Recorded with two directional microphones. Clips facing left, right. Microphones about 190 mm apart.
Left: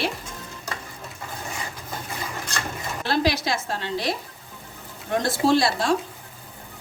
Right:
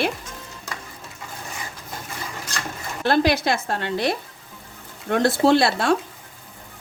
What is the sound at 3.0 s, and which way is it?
Sizzle, 55° right (ahead or behind).